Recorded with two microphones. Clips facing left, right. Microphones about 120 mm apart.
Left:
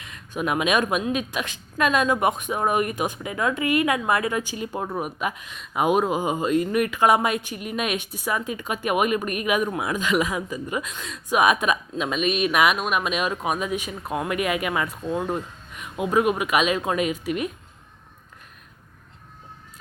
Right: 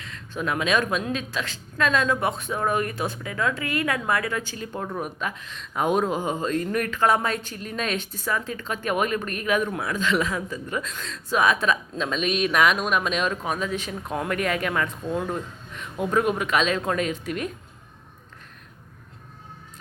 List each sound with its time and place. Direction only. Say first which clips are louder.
0.0 s speech: left 2 dB; 15° left (ahead or behind)